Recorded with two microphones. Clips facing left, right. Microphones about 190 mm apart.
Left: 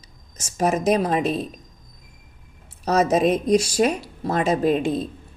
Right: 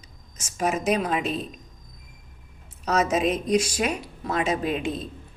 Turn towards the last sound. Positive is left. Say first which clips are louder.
# left 6 dB
turn(degrees=40)  # may be behind; listen again after turning